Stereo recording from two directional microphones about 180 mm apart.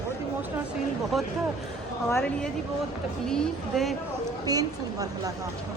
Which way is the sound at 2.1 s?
10° left (ahead or behind).